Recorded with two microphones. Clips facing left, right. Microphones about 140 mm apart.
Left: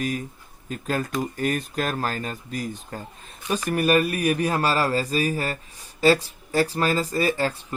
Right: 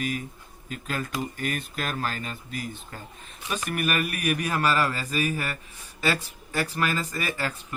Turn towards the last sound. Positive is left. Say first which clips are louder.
# left 7 dB
turn(degrees=35)  # may be behind; listen again after turning